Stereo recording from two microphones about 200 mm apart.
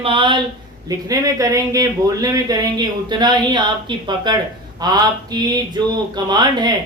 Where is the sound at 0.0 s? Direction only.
25° right (ahead or behind).